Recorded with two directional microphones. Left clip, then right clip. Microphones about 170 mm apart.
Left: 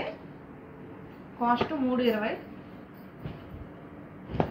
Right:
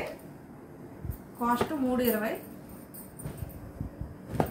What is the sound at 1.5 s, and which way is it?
Speech, 15° right (ahead or behind).